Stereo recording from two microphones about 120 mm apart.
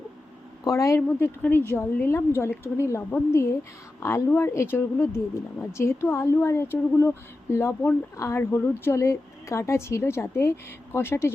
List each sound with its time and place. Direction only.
0.6 s speech: 30° left (ahead or behind)